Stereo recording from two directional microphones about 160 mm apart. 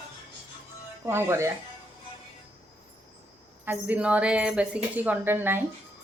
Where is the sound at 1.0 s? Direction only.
15° right (ahead or behind).